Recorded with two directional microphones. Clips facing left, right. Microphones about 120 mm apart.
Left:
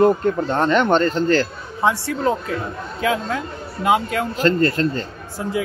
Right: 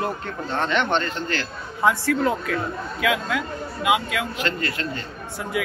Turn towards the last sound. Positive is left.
turn(degrees=35)  # may be behind; listen again after turning